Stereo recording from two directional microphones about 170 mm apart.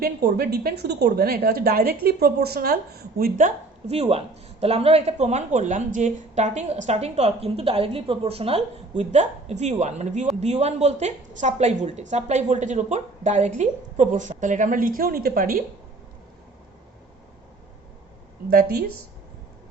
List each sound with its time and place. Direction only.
0.0 s a woman's voice: 65° right (ahead or behind)